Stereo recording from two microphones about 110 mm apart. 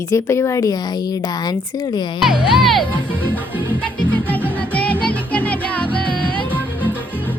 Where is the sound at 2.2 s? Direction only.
Centre (ahead or behind).